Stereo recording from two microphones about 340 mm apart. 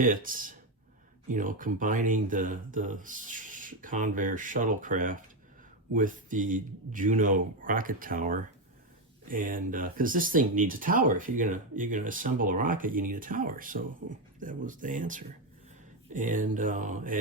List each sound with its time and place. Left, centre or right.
0.0 s speech: right